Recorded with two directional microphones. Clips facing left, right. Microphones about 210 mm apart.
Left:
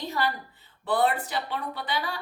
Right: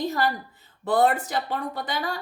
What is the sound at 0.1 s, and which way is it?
A woman's voice, 45° right (ahead or behind).